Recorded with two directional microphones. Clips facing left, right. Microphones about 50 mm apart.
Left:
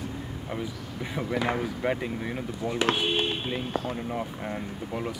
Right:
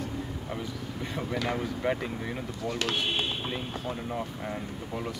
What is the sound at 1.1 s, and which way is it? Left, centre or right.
Speech, centre.